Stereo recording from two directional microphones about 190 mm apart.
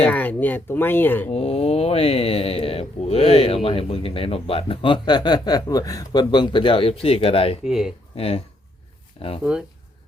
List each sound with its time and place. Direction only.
0.0 s speech: 10° left (ahead or behind)
1.3 s speech: 30° left (ahead or behind)
7.6 s speech: centre (ahead or behind)
8.1 s speech: 30° left (ahead or behind)
9.4 s speech: 5° right (ahead or behind)